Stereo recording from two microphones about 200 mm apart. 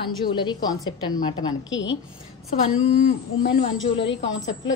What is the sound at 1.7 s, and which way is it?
Speech, 70° left (ahead or behind).